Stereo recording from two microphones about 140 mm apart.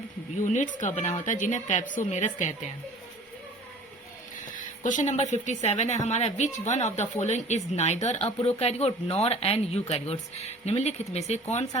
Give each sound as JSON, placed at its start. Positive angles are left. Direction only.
{"t": 0.4, "sound": "a woman's voice", "side_deg": 60}
{"t": 4.5, "sound": "speech", "side_deg": 65}